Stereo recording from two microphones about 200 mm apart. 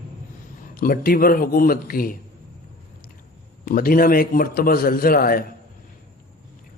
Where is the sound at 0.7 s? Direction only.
45° left (ahead or behind).